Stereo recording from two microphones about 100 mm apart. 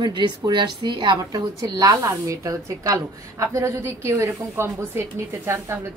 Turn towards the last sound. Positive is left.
turn(degrees=-25)  # may be behind; listen again after turning